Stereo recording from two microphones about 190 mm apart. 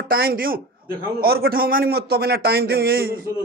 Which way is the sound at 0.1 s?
50° right (ahead or behind).